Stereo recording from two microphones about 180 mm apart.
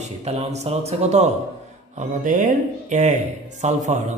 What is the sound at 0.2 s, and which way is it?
Speech, 40° right (ahead or behind).